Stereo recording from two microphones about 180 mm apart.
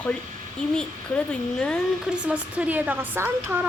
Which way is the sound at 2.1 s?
5° right (ahead or behind).